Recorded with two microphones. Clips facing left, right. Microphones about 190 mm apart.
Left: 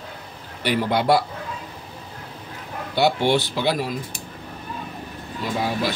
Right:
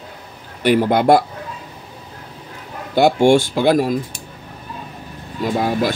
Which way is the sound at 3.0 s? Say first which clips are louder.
Right 7 dB; 50° right (ahead or behind).